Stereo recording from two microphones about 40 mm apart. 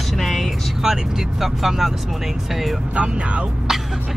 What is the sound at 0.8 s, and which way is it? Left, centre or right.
Speech, centre.